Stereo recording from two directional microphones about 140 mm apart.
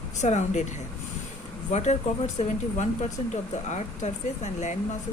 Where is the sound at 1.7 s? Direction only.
55° left (ahead or behind).